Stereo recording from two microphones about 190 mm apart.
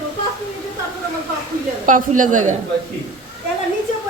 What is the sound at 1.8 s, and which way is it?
Speech, 45° right (ahead or behind).